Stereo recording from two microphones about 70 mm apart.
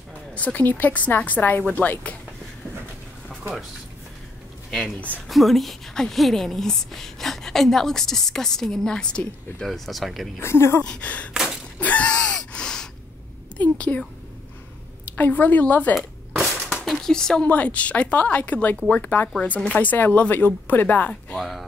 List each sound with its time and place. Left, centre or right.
0.3 s speech: centre
4.6 s a woman's voice: centre
9.7 s a woman's voice: centre
10.4 s speech: left
10.8 s a sound: centre
11.8 s gasp: centre
13.6 s a sound: left
15.1 s speech: left
15.9 s cap gun: centre
17.5 s speech: left
21.4 s a woman's voice: centre